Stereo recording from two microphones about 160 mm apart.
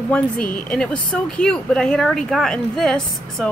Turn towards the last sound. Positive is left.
turn(degrees=0)  # may be behind; listen again after turning